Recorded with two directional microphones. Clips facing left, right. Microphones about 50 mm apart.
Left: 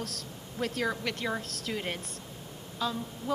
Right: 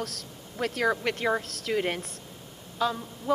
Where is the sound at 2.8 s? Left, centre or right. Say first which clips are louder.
Right 5 dB; right.